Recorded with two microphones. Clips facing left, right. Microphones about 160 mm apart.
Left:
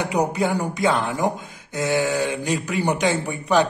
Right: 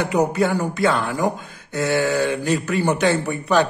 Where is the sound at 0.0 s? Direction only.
15° left (ahead or behind).